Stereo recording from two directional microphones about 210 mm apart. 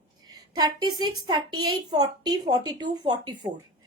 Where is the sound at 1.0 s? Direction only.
20° right (ahead or behind).